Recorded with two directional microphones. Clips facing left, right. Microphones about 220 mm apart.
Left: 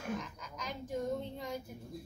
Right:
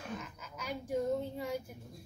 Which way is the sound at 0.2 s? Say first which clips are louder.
Left 1 dB; 5° right (ahead or behind).